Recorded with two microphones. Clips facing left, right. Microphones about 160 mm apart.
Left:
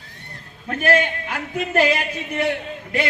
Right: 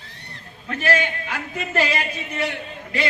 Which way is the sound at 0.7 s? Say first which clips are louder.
Left 3 dB; 50° left (ahead or behind).